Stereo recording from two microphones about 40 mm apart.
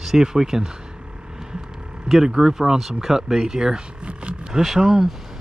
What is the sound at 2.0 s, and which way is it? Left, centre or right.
Speech, centre.